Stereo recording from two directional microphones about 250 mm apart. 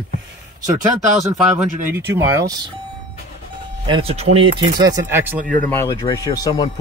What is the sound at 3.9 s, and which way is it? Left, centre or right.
Speech, right.